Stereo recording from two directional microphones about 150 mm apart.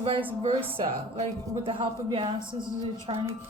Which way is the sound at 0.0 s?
35° right (ahead or behind).